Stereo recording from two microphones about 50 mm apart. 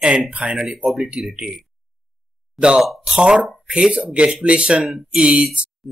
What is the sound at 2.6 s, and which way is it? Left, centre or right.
Speech, centre.